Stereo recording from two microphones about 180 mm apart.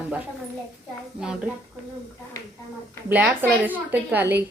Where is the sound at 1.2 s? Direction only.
5° right (ahead or behind).